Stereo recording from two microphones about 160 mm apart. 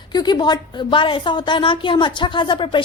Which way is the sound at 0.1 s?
25° left (ahead or behind).